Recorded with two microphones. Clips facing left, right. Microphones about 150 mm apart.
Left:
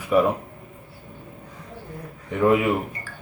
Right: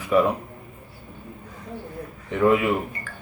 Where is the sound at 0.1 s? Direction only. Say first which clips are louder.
Even; 10° left (ahead or behind).